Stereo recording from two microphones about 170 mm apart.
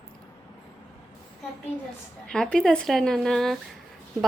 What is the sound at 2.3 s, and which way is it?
Speech, 5° left (ahead or behind).